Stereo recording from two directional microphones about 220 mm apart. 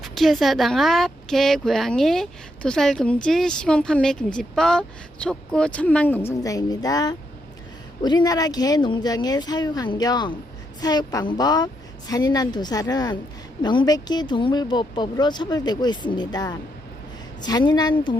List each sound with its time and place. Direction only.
0.0 s a woman's voice: centre (ahead or behind); by 18.2 s 20° left (ahead or behind)